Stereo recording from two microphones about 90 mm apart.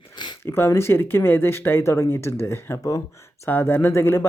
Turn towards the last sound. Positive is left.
turn(degrees=25)  # may be behind; listen again after turning